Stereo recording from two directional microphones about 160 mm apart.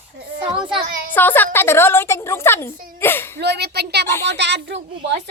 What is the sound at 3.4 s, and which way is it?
Speech, 90° right.